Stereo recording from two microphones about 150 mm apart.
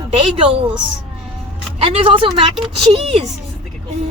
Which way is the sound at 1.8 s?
40° right (ahead or behind).